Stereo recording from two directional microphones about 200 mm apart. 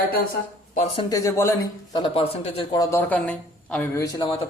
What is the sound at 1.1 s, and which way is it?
Speech, 15° left (ahead or behind).